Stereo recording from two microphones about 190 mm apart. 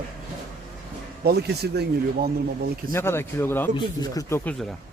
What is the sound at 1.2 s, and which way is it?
Speech, 55° right (ahead or behind).